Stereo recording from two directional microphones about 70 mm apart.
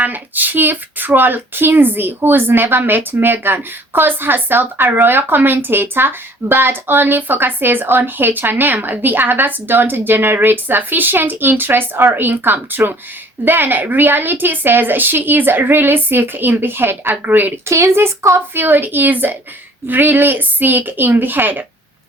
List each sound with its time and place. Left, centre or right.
0.0 s speech: right
17.7 s a woman's voice: right